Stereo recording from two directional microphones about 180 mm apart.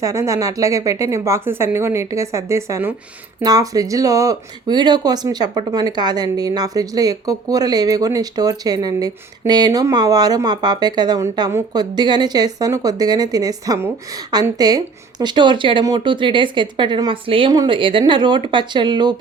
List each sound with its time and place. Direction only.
0.0 s speech: 15° right (ahead or behind)